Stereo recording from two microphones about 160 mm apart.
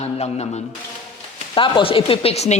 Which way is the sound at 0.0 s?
40° left (ahead or behind).